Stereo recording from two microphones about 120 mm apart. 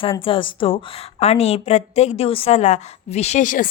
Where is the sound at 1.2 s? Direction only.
60° left (ahead or behind); by 3.6 s 80° left.